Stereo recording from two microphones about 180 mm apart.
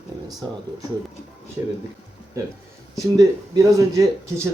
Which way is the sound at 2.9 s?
20° right (ahead or behind).